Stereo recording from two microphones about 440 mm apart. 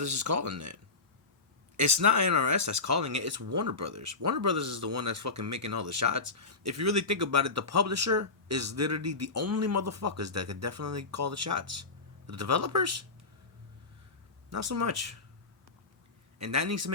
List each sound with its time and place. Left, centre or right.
0.0 s speech: right
14.5 s speech: right
16.4 s speech: right